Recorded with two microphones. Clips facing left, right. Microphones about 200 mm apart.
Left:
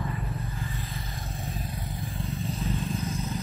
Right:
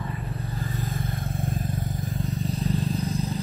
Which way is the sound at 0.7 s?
45° right (ahead or behind).